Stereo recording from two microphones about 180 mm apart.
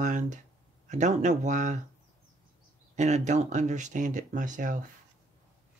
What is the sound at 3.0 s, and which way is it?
Speech, 40° right (ahead or behind).